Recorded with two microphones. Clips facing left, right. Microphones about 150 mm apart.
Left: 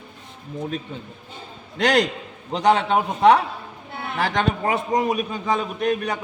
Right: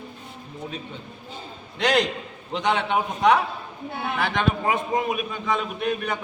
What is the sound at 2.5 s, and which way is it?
A man's voice, 40° left (ahead or behind).